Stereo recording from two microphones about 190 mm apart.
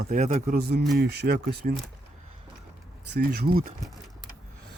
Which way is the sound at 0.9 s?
60° right (ahead or behind).